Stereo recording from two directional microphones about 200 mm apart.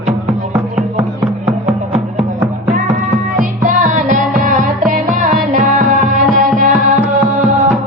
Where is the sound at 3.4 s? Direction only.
40° right (ahead or behind).